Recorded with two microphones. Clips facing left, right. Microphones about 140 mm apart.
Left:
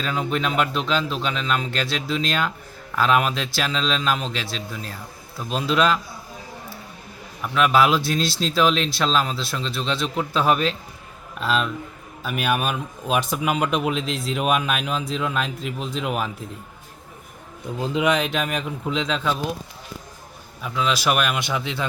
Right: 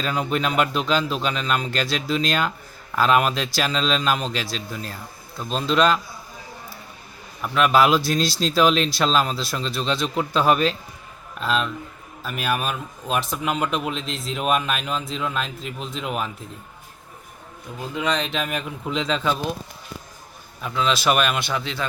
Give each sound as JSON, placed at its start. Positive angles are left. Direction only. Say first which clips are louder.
{"t": 0.0, "sound": "speech", "louder": "right 1 dB", "side_deg": 0}
{"t": 7.4, "sound": "speech", "louder": "right 1 dB", "side_deg": 0}
{"t": 17.7, "sound": "a man's voice", "louder": "left 5 dB", "side_deg": 20}
{"t": 18.1, "sound": "speech", "louder": "left 2 dB", "side_deg": 5}
{"t": 20.6, "sound": "speech", "louder": "right 1 dB", "side_deg": 5}
{"t": 21.4, "sound": "speech", "louder": "left 1 dB", "side_deg": 15}